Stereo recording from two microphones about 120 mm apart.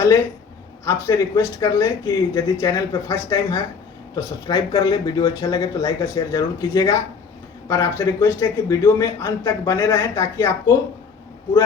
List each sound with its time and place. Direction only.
0.9 s a man's voice: 25° left (ahead or behind)